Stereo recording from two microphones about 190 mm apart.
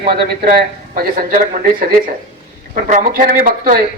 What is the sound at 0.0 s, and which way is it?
A man's voice, 50° right (ahead or behind).